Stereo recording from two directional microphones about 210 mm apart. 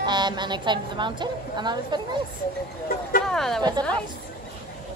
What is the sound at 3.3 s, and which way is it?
Speech, centre (ahead or behind).